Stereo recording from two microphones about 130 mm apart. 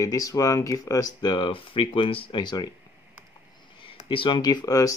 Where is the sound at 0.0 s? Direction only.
25° left (ahead or behind).